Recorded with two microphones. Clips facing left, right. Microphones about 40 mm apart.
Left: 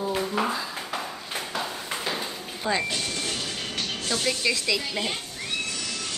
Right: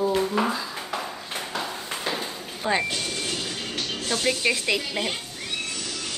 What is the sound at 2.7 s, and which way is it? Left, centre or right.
Speech, centre.